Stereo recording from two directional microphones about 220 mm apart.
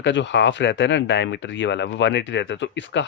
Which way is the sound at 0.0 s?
55° left (ahead or behind).